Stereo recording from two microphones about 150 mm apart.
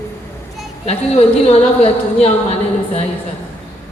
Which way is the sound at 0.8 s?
45° left (ahead or behind).